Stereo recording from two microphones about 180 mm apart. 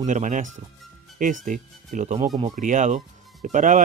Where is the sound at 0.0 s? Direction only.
45° right (ahead or behind).